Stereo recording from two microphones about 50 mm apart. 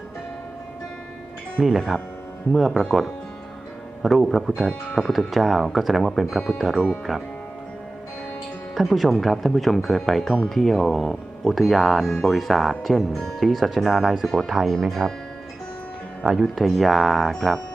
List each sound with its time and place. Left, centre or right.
1.6 s speech: centre
4.0 s speech: centre
4.6 s speech: centre
4.9 s speech: centre
8.7 s speech: centre
16.2 s speech: centre